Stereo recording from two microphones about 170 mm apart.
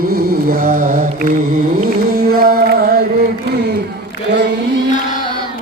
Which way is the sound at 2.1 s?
65° right (ahead or behind).